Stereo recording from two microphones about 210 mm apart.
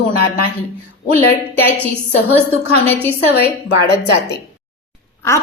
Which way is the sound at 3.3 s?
50° left (ahead or behind).